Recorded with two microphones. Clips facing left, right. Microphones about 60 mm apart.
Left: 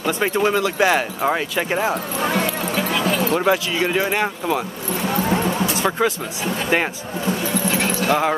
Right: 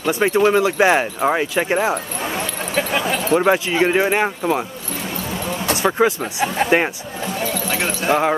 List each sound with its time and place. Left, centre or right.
0.0 s speech: centre
0.6 s speech: centre
3.1 s keys jangling: centre
3.5 s speech: right
5.8 s speech: centre
8.1 s speech: centre